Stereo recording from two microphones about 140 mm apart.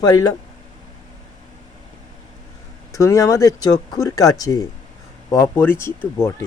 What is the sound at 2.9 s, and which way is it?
Speech, 20° left (ahead or behind).